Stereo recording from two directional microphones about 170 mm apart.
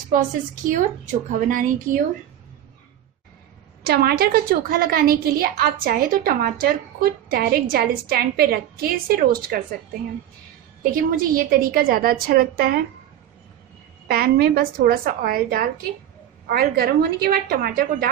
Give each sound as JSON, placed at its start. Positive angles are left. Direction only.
{"t": 0.1, "sound": "a woman's voice", "side_deg": -50}
{"t": 3.8, "sound": "a woman's voice", "side_deg": -65}
{"t": 11.0, "sound": "a woman's voice", "side_deg": -55}
{"t": 14.0, "sound": "a woman's voice", "side_deg": -65}